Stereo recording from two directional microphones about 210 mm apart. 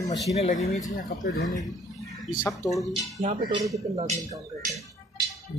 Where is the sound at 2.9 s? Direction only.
30° right (ahead or behind).